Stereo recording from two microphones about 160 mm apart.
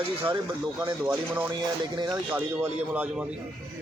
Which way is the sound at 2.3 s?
10° right (ahead or behind).